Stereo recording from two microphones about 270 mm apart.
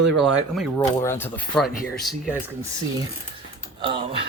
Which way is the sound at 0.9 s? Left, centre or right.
Centre.